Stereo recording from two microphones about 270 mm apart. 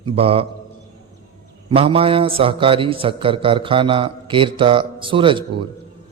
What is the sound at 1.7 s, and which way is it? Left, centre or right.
A man's voice, right.